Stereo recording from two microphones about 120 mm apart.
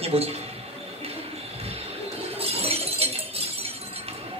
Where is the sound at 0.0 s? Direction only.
55° right (ahead or behind).